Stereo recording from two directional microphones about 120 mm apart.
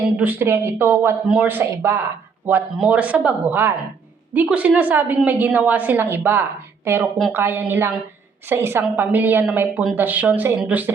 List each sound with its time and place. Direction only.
0.2 s a woman's voice: 15° right (ahead or behind)
2.7 s a woman's voice: 10° right (ahead or behind)